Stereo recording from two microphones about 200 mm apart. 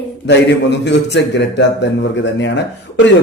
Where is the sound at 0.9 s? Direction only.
60° left (ahead or behind).